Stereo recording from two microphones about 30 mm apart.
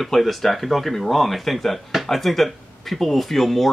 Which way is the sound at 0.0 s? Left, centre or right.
Centre.